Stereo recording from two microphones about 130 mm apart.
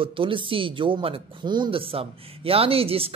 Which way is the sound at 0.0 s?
40° right (ahead or behind).